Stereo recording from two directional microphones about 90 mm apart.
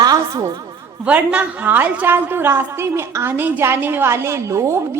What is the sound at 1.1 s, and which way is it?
A woman's voice, 15° right (ahead or behind).